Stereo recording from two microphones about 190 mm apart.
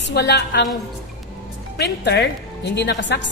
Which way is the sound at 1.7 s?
60° left (ahead or behind).